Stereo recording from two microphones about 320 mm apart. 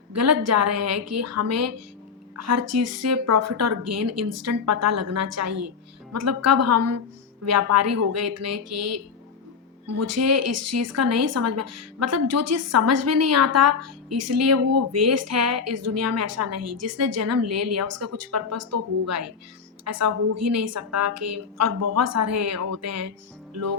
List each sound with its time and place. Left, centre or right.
0.1 s a woman's voice: right